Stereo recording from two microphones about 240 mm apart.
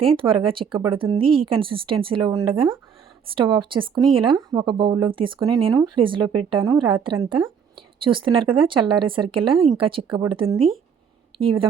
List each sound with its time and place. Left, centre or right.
0.0 s a woman's voice: right